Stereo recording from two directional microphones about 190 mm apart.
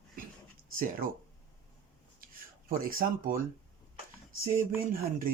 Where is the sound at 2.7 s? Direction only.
50° right (ahead or behind).